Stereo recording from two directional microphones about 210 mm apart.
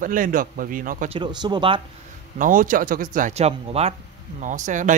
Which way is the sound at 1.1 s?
20° right (ahead or behind).